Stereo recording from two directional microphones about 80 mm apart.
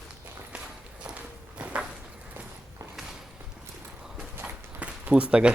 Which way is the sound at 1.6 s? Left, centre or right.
Centre.